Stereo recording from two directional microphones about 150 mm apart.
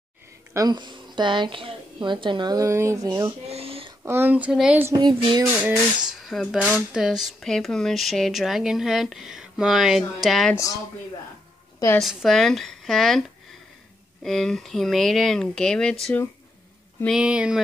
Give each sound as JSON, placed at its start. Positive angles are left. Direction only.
{"t": 0.5, "sound": "a woman's voice", "side_deg": -25}
{"t": 3.4, "sound": "a sound", "side_deg": -40}
{"t": 4.0, "sound": "speech", "side_deg": -15}
{"t": 4.9, "sound": "a woman's voice", "side_deg": -30}
{"t": 5.4, "sound": "speech", "side_deg": -15}
{"t": 5.9, "sound": "speech", "side_deg": 0}
{"t": 12.0, "sound": "speech", "side_deg": 0}
{"t": 17.2, "sound": "speech", "side_deg": -5}